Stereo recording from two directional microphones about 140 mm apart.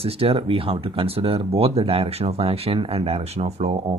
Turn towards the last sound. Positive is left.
turn(degrees=-50)  # may be behind; listen again after turning